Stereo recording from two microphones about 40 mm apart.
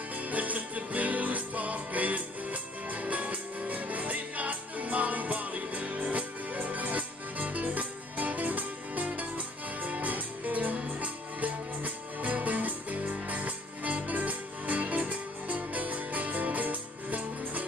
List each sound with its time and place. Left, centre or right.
0.3 s music: right